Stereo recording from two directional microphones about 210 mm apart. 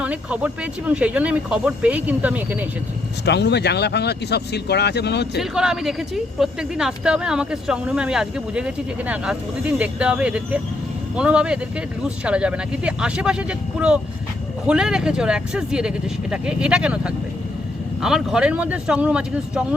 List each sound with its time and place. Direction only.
0.0 s speech: 5° right (ahead or behind)
3.2 s speech: 55° left (ahead or behind)
5.4 s speech: 5° right (ahead or behind)